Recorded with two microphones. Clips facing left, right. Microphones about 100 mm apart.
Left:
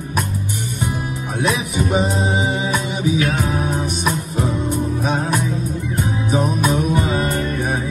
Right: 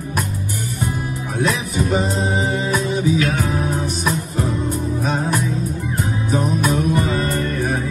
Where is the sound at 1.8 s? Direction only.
15° left (ahead or behind).